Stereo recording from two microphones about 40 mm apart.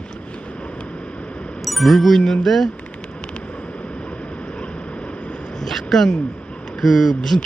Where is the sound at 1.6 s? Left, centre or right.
Centre.